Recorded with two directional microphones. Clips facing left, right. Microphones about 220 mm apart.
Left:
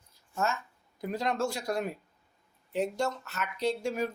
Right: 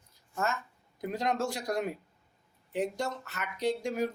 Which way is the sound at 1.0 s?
20° right (ahead or behind).